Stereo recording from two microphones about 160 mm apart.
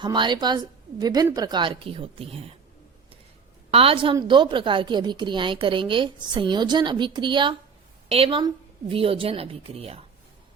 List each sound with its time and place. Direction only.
0.0 s a woman's voice: 30° right (ahead or behind)
3.7 s a woman's voice: 35° right (ahead or behind)